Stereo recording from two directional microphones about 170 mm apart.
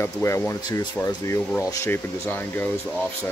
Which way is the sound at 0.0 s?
15° left (ahead or behind).